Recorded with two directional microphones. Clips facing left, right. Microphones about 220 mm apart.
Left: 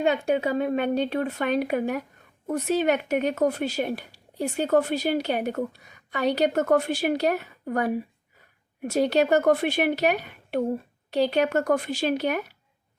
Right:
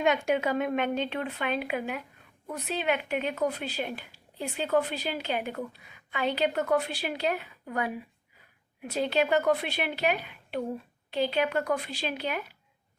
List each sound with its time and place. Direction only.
0.0 s speech: 35° left (ahead or behind)